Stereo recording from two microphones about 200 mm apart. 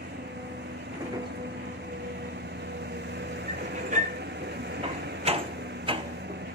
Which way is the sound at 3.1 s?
55° right (ahead or behind).